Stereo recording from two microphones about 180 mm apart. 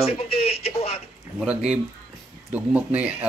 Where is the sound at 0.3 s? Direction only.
35° left (ahead or behind).